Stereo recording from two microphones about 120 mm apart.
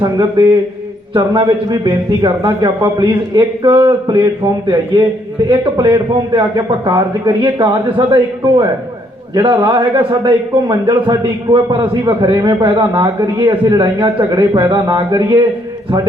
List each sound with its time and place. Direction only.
1.1 s a man's voice: 40° right (ahead or behind)
12.0 s a man's voice: 35° right (ahead or behind)